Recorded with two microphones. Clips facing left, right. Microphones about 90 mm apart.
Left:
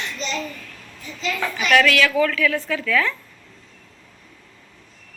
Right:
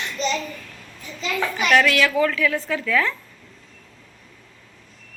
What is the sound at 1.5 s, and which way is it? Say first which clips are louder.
A woman's voice: left 1 dB; 20° right (ahead or behind).